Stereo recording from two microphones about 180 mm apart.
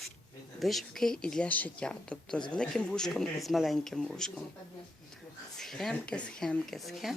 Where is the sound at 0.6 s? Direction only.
Centre (ahead or behind).